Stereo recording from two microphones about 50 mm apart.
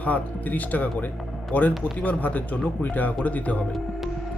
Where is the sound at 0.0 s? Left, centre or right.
Left.